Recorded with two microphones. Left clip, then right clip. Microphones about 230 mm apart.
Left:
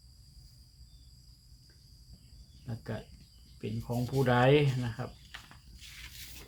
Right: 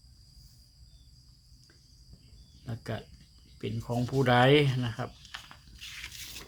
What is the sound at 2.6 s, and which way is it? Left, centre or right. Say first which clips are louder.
Speech: right 3 dB; right.